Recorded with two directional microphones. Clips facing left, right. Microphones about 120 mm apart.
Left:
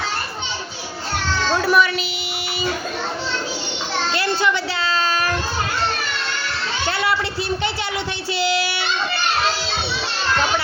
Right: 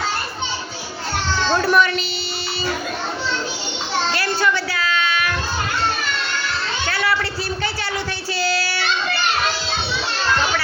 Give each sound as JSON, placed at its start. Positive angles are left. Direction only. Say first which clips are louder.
{"t": 1.5, "sound": "a woman's voice", "louder": "even", "side_deg": 5}
{"t": 4.1, "sound": "a sound", "louder": "left 2 dB", "side_deg": 20}
{"t": 6.8, "sound": "children playing", "louder": "left 1 dB", "side_deg": 25}
{"t": 8.4, "sound": "child singing", "louder": "left 2 dB", "side_deg": 20}